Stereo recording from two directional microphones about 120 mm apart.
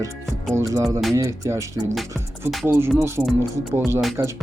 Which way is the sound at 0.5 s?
25° right (ahead or behind).